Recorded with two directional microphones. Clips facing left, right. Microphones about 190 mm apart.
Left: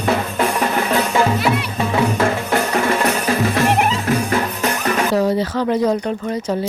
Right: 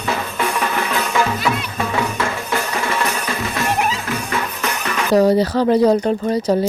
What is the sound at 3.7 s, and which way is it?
Music, 60° left (ahead or behind).